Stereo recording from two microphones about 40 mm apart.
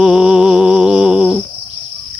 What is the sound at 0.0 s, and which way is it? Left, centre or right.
Music, centre.